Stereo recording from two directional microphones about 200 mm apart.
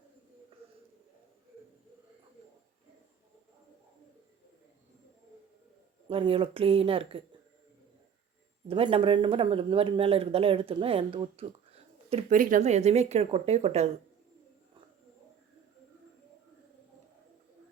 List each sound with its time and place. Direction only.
6.1 s speech: 30° right (ahead or behind)
8.6 s speech: 25° right (ahead or behind)
12.4 s speech: 40° right (ahead or behind)